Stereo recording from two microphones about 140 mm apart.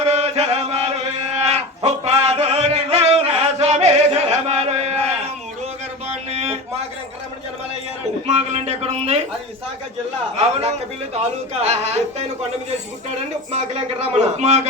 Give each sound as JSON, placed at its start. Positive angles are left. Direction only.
{"t": 0.0, "sound": "chant", "side_deg": -50}
{"t": 1.5, "sound": "music", "side_deg": -50}
{"t": 6.3, "sound": "a sound", "side_deg": -50}
{"t": 8.3, "sound": "a man's voice", "side_deg": -50}
{"t": 10.3, "sound": "a man's voice", "side_deg": -50}
{"t": 13.5, "sound": "a man's voice", "side_deg": -50}